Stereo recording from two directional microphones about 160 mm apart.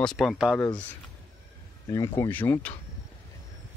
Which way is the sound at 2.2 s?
10° left (ahead or behind).